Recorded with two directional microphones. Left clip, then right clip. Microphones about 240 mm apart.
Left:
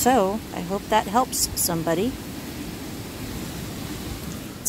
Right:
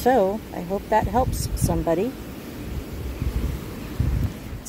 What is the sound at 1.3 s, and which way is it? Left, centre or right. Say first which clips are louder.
Speech: left 2 dB; centre.